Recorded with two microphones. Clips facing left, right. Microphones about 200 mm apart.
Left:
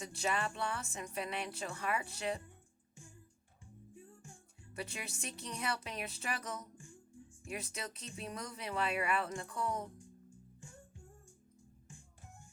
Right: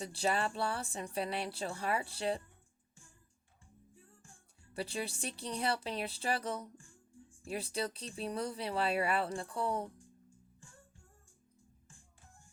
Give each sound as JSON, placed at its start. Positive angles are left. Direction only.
{"t": 0.0, "sound": "speech", "side_deg": -35}
{"t": 3.9, "sound": "music", "side_deg": 15}
{"t": 4.7, "sound": "speech", "side_deg": -30}